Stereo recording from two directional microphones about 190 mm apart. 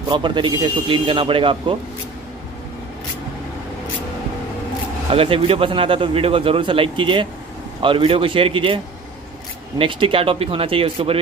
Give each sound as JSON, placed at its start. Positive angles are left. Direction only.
{"t": 0.1, "sound": "a man's voice", "side_deg": -25}
{"t": 5.1, "sound": "a man's voice", "side_deg": -30}